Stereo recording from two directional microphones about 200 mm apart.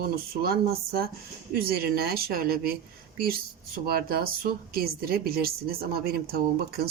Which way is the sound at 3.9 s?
50° right (ahead or behind).